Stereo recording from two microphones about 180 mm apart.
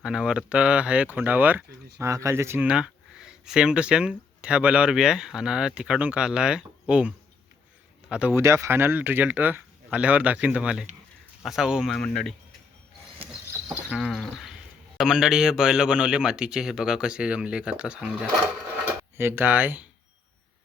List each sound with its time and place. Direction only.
0.0 s speech: 5° right (ahead or behind)
8.1 s speech: 10° right (ahead or behind)
13.9 s a sound: centre (ahead or behind)
14.9 s speech: 5° right (ahead or behind)